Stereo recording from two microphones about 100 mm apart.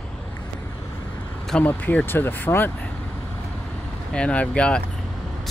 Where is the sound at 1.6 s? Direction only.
20° left (ahead or behind).